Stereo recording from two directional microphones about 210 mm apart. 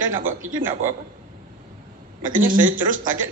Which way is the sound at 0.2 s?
40° right (ahead or behind).